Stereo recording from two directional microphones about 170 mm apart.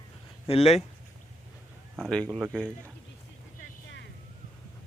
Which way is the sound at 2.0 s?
5° left (ahead or behind).